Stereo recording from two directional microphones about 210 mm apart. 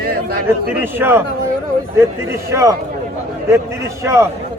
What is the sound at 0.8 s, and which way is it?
Speech, 10° right (ahead or behind).